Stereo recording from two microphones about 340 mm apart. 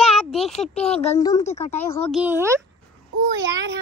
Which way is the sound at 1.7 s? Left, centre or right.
Centre.